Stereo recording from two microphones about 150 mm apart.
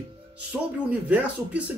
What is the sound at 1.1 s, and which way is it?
Speech, 10° right (ahead or behind).